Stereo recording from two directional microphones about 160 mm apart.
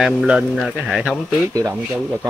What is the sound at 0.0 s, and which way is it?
A man's voice, 5° right (ahead or behind).